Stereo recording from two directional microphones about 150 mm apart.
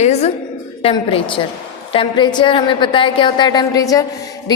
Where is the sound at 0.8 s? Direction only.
40° left (ahead or behind).